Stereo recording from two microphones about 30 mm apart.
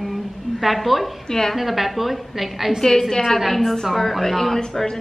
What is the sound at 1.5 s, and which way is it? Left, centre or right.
A woman's voice, centre.